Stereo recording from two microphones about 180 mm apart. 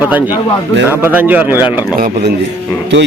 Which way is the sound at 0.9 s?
10° right (ahead or behind).